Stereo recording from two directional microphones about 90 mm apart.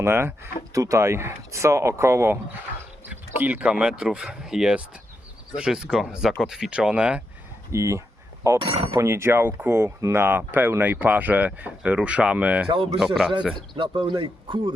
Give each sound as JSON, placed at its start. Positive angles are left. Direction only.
{"t": 0.0, "sound": "speech", "side_deg": -25}
{"t": 3.1, "sound": "speech", "side_deg": -15}
{"t": 7.7, "sound": "speech", "side_deg": -35}
{"t": 8.6, "sound": "speech", "side_deg": -90}
{"t": 9.0, "sound": "speech", "side_deg": -30}
{"t": 12.6, "sound": "speech", "side_deg": -90}
{"t": 13.7, "sound": "speech", "side_deg": -70}